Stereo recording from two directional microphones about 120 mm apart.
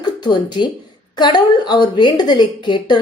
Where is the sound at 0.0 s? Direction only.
40° left (ahead or behind).